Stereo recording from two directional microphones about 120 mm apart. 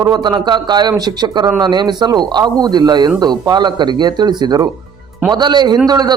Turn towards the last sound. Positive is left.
turn(degrees=-35)  # may be behind; listen again after turning